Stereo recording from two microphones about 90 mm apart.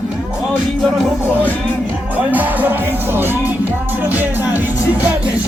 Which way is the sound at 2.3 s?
20° right (ahead or behind).